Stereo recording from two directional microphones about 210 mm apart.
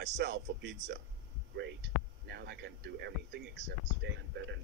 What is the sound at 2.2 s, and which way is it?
Speech, 50° right (ahead or behind).